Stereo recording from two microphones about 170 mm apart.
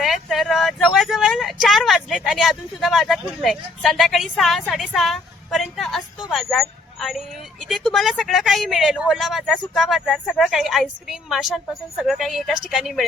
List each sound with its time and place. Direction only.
0.0 s vehicle: centre (ahead or behind)
6.2 s speech: centre (ahead or behind)